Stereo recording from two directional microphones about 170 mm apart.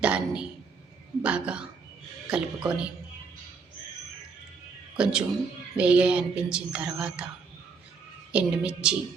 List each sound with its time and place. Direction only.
0.0 s a sound: 5° right (ahead or behind)
1.2 s speech: 5° right (ahead or behind)
5.0 s a woman's voice: 5° right (ahead or behind)
8.3 s a woman's voice: 5° right (ahead or behind)